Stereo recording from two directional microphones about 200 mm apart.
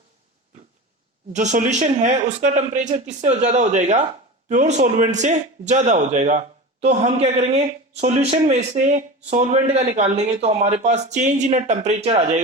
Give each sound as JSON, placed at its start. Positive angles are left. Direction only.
{"t": 1.3, "sound": "speech", "side_deg": -35}